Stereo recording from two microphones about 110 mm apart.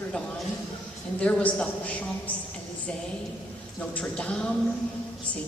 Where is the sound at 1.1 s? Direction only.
10° left (ahead or behind).